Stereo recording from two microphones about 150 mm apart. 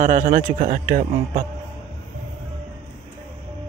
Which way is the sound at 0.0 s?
55° right (ahead or behind).